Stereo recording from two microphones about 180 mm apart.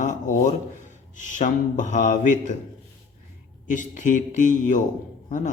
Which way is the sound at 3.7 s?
45° left (ahead or behind).